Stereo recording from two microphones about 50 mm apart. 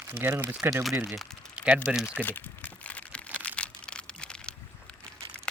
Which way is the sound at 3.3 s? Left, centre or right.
Left.